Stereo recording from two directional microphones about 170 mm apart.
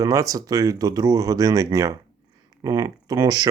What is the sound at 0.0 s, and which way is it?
Speech, 20° right (ahead or behind).